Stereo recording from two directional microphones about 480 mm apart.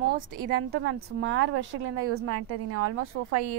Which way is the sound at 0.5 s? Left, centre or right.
Centre.